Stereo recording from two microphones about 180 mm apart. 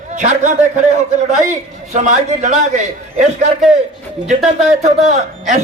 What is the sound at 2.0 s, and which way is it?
A man's voice, 40° right (ahead or behind).